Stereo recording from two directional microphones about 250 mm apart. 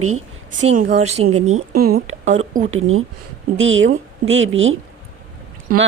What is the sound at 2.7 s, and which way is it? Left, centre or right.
Speech, right.